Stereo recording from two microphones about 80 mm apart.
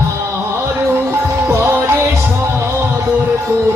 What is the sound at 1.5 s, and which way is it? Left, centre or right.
Music, right.